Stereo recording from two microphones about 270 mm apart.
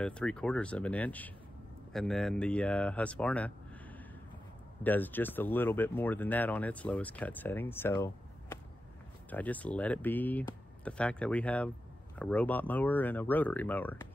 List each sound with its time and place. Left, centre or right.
0.0 s speech: centre
4.8 s speech: centre